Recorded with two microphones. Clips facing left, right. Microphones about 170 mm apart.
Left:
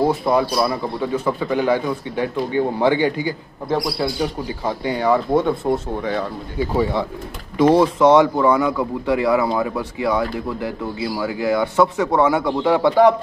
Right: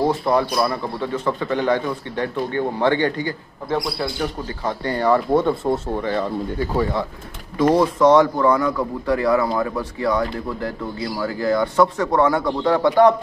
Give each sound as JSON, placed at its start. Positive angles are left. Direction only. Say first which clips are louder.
{"t": 0.0, "sound": "speech", "louder": "left 1 dB", "side_deg": 10}
{"t": 6.6, "sound": "speech", "louder": "left 4 dB", "side_deg": 15}
{"t": 8.4, "sound": "speech", "louder": "left 1 dB", "side_deg": 10}